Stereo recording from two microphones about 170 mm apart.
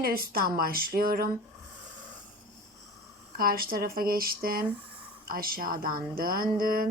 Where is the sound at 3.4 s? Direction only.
60° right (ahead or behind).